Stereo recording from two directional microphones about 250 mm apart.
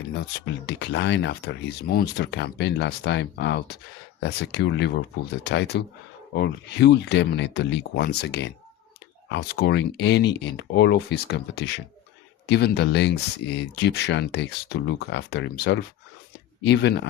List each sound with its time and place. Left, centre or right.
0.1 s speech: left